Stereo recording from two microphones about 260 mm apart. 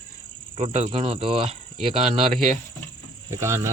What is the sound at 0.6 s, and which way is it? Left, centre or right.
Speech, right.